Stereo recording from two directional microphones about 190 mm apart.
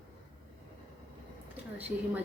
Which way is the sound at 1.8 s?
10° right (ahead or behind).